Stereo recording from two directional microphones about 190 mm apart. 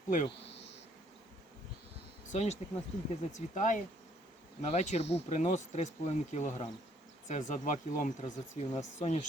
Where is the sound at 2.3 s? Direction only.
35° left (ahead or behind).